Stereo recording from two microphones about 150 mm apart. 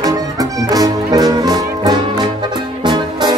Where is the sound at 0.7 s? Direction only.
25° right (ahead or behind).